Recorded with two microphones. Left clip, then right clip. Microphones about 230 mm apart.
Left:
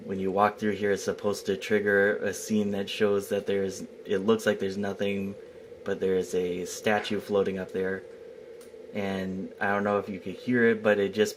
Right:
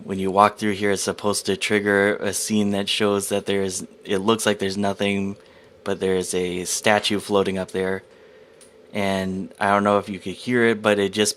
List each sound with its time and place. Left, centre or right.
0.1 s speech: right